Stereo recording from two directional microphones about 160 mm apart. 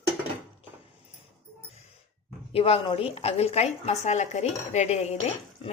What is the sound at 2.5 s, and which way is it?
A woman's voice, 35° left (ahead or behind).